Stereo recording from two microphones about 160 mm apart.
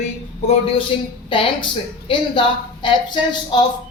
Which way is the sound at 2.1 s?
30° left (ahead or behind).